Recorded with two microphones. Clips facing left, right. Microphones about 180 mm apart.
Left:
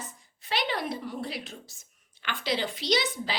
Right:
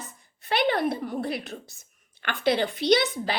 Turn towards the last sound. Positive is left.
turn(degrees=-60)  # may be behind; listen again after turning